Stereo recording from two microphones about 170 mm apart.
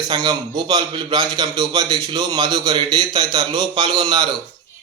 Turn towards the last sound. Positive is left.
turn(degrees=-25)  # may be behind; listen again after turning